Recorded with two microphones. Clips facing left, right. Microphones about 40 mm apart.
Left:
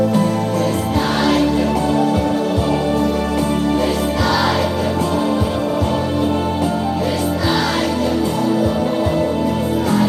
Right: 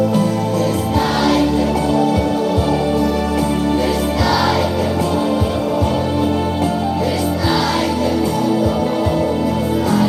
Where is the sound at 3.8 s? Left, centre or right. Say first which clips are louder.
Even; left.